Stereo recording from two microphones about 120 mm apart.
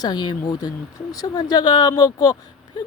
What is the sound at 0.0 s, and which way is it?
Speech, 35° left (ahead or behind).